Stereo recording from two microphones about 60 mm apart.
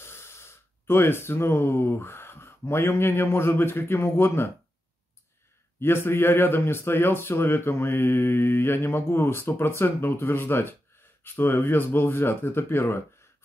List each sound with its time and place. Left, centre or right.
0.0 s speech: left
5.8 s speech: left